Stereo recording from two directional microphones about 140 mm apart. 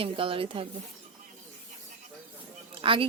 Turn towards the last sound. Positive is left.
turn(degrees=-40)  # may be behind; listen again after turning